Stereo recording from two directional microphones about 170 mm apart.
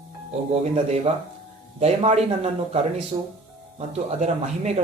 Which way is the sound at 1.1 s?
30° right (ahead or behind).